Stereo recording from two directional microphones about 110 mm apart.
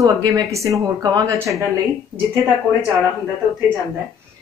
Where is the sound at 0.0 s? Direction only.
30° right (ahead or behind).